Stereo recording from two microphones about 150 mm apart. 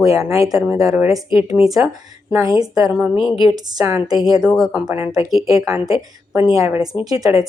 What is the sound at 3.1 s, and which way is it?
Speech, 35° left (ahead or behind).